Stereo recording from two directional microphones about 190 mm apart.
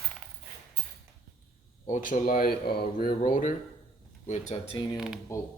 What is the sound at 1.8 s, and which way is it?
Speech, 40° left (ahead or behind).